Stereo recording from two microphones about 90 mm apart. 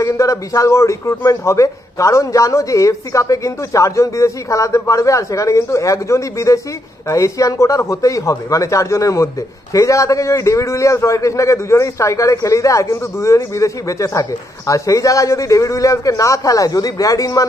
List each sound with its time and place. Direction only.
0.0 s speech: 35° left (ahead or behind)